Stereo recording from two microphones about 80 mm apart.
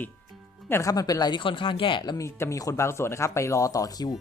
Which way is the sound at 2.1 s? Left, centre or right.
Left.